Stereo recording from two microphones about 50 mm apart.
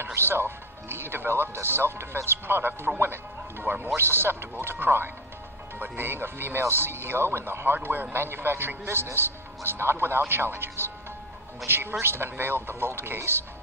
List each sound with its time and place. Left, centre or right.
0.0 s speech: right